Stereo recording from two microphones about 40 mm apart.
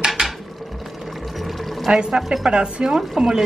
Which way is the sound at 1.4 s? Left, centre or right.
Centre.